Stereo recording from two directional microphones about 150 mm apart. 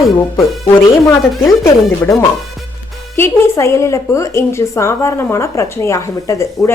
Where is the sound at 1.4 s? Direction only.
20° left (ahead or behind).